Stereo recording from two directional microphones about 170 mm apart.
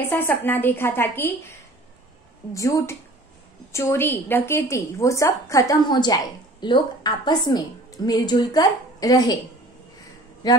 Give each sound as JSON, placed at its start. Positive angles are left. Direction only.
{"t": 0.0, "sound": "a woman's voice", "side_deg": 15}
{"t": 10.4, "sound": "a woman's voice", "side_deg": 25}